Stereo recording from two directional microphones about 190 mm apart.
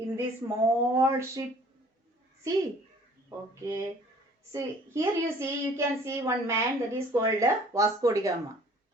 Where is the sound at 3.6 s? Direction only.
15° right (ahead or behind).